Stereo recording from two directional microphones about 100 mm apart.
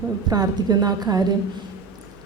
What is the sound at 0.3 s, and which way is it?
Speech, 40° right (ahead or behind).